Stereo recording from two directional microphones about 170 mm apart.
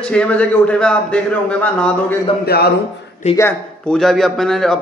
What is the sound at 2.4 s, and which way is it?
Speech, 65° left (ahead or behind).